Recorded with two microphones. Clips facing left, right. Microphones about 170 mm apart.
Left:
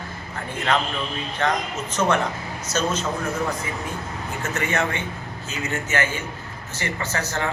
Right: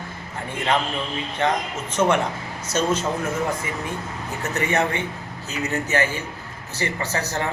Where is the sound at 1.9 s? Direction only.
30° right (ahead or behind).